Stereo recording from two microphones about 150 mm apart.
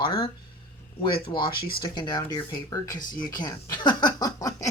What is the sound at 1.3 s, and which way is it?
Speech, 30° left (ahead or behind).